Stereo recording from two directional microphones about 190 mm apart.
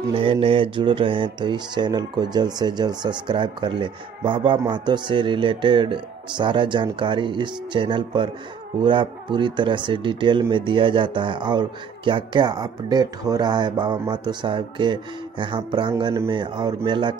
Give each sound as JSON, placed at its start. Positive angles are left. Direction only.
{"t": 0.1, "sound": "speech", "side_deg": -30}